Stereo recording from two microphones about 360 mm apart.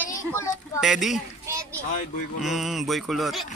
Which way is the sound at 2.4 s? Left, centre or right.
Centre.